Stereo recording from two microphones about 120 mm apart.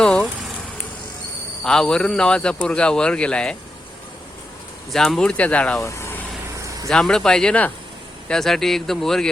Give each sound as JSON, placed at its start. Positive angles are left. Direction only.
{"t": 0.0, "sound": "a sound", "side_deg": 10}
{"t": 1.6, "sound": "a man's voice", "side_deg": 5}
{"t": 4.9, "sound": "a man's voice", "side_deg": 5}
{"t": 5.8, "sound": "vehicle", "side_deg": 20}
{"t": 6.8, "sound": "speech", "side_deg": 5}